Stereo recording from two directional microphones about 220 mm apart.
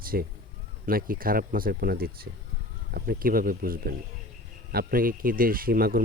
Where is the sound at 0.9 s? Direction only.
40° right (ahead or behind).